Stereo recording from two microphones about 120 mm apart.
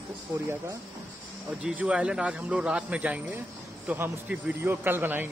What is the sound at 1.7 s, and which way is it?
A man's voice, 10° right (ahead or behind).